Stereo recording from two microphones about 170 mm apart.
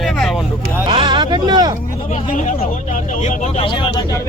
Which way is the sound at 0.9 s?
30° right (ahead or behind).